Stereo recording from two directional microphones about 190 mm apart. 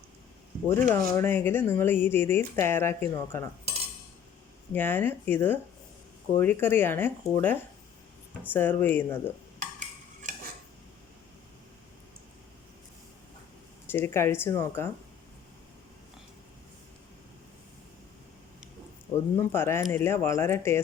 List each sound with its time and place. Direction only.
0.7 s speech: 15° left (ahead or behind)
4.7 s speech: 10° left (ahead or behind)
9.6 s stir: 40° right (ahead or behind)
13.8 s speech: 10° left (ahead or behind)
19.4 s speech: 15° left (ahead or behind)